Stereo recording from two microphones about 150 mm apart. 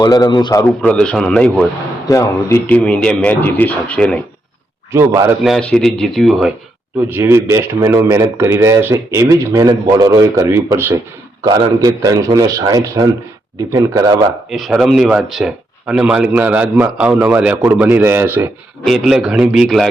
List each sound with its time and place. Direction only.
0.0 s a man's voice: 25° left (ahead or behind)
0.7 s speech: 5° left (ahead or behind)
2.0 s a man's voice: 20° left (ahead or behind)
2.6 s a man's voice: 5° left (ahead or behind)
4.9 s speech: 20° right (ahead or behind)
5.4 s speech: 5° left (ahead or behind)
7.1 s speech: 15° right (ahead or behind)
14.5 s a man's voice: centre (ahead or behind)
18.9 s speech: centre (ahead or behind)